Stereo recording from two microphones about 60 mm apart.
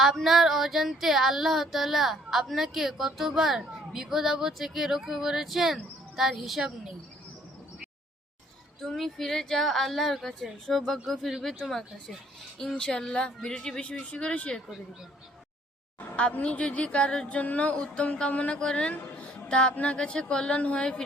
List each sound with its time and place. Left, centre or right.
0.0 s female singing: centre
8.8 s female singing: centre
12.5 s speech: centre
16.0 s speech: left